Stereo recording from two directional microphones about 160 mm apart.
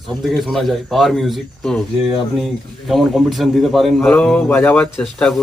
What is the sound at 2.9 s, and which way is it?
A man's voice, centre (ahead or behind).